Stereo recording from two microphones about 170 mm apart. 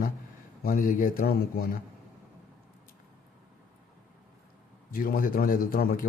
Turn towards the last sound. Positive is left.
turn(degrees=55)  # may be behind; listen again after turning